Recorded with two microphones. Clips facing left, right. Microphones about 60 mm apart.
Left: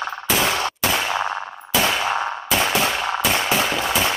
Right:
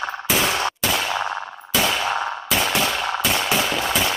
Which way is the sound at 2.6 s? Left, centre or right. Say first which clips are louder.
Left 2 dB; centre.